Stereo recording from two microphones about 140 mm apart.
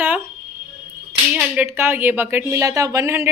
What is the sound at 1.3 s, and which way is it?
Clapping, 10° right (ahead or behind).